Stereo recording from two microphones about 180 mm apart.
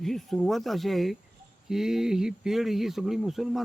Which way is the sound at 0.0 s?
Centre (ahead or behind).